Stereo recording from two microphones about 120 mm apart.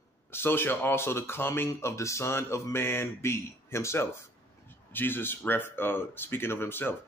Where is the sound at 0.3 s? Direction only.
20° left (ahead or behind).